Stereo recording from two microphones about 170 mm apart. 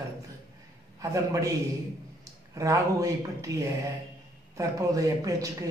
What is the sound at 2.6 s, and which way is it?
A man's voice, 20° right (ahead or behind).